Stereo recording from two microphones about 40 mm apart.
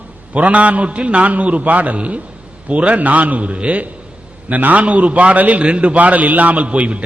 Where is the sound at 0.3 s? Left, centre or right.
Right.